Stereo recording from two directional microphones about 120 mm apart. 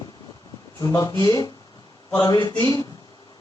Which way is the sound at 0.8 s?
30° left (ahead or behind).